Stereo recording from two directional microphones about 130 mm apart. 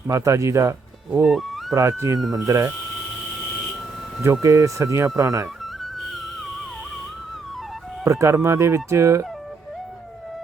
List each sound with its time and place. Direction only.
0.1 s speech: 25° right (ahead or behind)
4.2 s speech: 20° right (ahead or behind)
8.0 s speech: 25° right (ahead or behind)